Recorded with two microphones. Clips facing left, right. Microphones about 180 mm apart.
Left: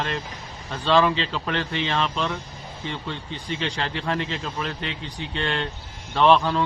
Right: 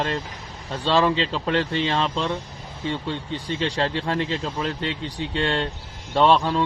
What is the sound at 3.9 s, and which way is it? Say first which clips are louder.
A man's voice: right 2 dB; 25° right (ahead or behind).